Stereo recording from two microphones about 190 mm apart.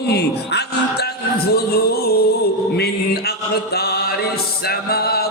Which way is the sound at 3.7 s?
55° left (ahead or behind).